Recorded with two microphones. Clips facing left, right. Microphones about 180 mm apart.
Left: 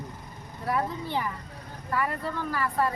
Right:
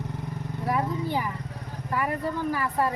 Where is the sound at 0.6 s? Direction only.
10° right (ahead or behind).